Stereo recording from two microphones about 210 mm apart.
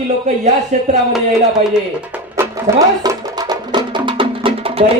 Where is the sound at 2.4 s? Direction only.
15° right (ahead or behind).